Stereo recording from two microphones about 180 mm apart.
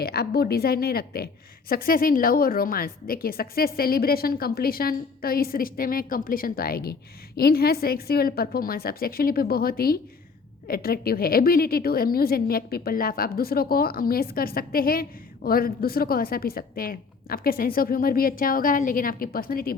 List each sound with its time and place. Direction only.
0.0 s a woman's voice: 60° left (ahead or behind)